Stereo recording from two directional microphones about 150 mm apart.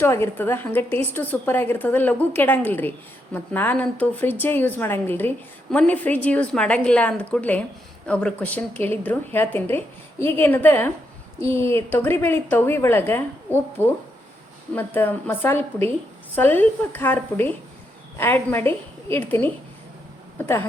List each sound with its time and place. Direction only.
0.0 s a woman's voice: 15° left (ahead or behind)